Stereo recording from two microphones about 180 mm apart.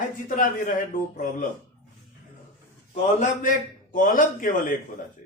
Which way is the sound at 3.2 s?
50° left (ahead or behind).